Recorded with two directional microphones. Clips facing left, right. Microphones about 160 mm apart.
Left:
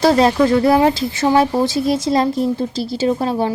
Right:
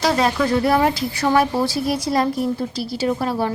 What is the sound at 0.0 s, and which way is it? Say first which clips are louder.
Speech: left 6 dB; 30° left (ahead or behind).